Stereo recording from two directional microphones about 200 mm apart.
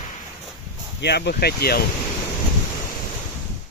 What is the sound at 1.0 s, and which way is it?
Speech, 55° left (ahead or behind).